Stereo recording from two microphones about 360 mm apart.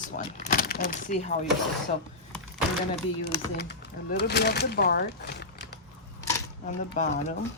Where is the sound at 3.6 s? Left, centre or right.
Left.